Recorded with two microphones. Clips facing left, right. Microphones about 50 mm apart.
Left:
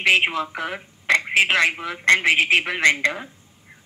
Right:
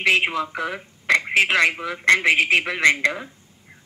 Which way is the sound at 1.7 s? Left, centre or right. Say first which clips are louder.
Even; centre.